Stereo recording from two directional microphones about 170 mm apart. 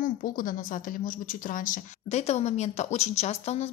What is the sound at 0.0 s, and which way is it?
A woman's voice, 55° left (ahead or behind).